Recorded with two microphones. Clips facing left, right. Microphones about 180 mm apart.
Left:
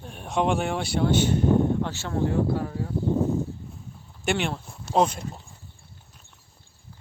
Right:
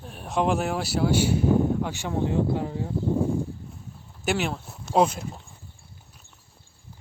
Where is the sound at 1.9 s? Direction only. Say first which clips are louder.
Even; 15° right (ahead or behind).